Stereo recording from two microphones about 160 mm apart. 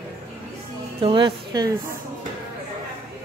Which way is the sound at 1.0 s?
30° right (ahead or behind).